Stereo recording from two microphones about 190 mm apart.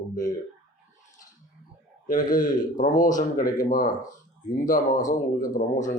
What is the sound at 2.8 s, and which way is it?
Speech, 40° left (ahead or behind).